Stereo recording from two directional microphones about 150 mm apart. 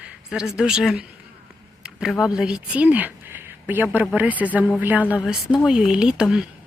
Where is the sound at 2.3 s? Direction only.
5° right (ahead or behind).